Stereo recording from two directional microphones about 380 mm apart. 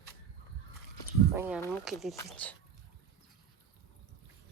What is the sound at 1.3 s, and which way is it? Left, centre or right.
Speech, centre.